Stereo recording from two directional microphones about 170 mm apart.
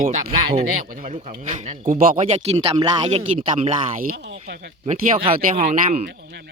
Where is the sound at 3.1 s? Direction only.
45° right (ahead or behind).